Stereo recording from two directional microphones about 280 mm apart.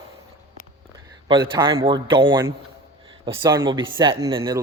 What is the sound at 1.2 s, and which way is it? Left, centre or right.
Speech, centre.